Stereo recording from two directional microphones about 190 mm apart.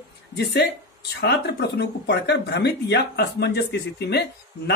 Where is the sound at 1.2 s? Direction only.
60° left (ahead or behind).